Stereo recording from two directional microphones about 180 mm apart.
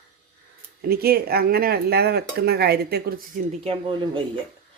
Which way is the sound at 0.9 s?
60° right (ahead or behind).